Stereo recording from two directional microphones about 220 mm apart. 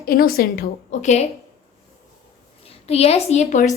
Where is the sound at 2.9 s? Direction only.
25° left (ahead or behind).